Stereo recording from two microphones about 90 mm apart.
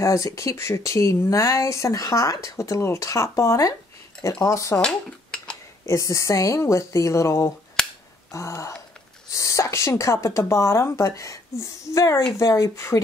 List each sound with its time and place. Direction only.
0.0 s speech: 35° left (ahead or behind)
4.7 s dishes: 10° left (ahead or behind)
5.9 s speech: 40° left (ahead or behind)
7.8 s finger snapping: 5° left (ahead or behind)
8.3 s a woman's voice: 35° left (ahead or behind)